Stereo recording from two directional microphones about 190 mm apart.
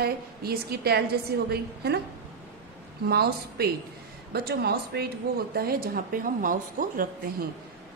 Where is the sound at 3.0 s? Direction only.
55° right (ahead or behind).